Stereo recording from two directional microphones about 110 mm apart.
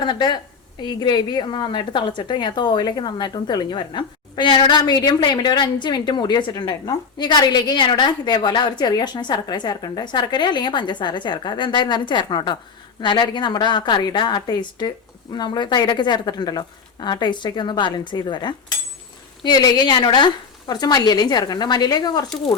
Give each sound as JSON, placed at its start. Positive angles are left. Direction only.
{"t": 0.0, "sound": "a woman's voice", "side_deg": 45}